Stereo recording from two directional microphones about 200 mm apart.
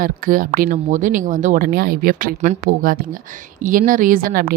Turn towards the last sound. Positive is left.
turn(degrees=-50)  # may be behind; listen again after turning